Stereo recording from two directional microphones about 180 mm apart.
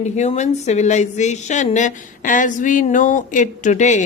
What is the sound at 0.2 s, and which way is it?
A woman's voice, 40° left (ahead or behind).